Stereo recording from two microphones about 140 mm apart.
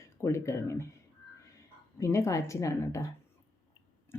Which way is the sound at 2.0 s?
20° left (ahead or behind).